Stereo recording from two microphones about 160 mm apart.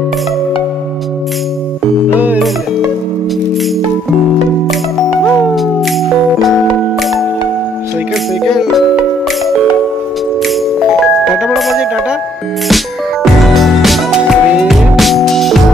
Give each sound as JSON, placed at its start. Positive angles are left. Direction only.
{"t": 5.5, "sound": "music", "side_deg": 0}
{"t": 8.5, "sound": "music", "side_deg": 0}
{"t": 11.3, "sound": "music", "side_deg": 0}